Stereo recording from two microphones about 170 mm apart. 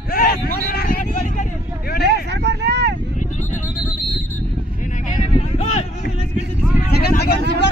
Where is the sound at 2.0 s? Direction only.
75° right (ahead or behind).